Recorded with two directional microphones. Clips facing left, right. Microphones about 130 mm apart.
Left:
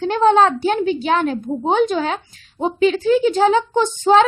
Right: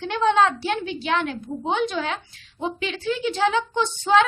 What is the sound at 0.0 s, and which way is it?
A woman's voice, 45° left (ahead or behind).